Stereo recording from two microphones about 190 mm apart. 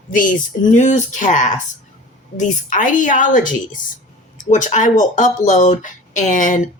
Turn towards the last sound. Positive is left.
turn(degrees=40)  # may be behind; listen again after turning